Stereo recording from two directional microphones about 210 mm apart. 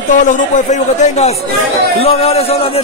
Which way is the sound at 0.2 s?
35° left (ahead or behind).